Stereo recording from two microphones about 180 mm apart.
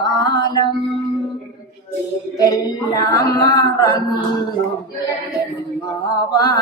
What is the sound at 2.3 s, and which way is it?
A woman's voice, 20° left (ahead or behind).